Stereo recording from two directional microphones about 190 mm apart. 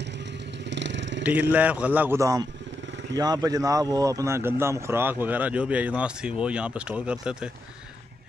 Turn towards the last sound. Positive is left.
turn(degrees=-5)  # may be behind; listen again after turning